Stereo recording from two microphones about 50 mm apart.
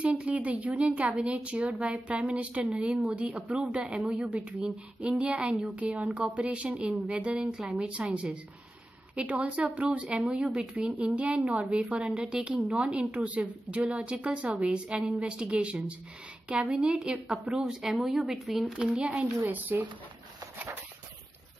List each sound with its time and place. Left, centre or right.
0.0 s speech: right
7.5 s a woman's voice: centre
8.1 s a woman's voice: right; by 18.7 s centre
18.7 s speech: right
19.4 s speech: right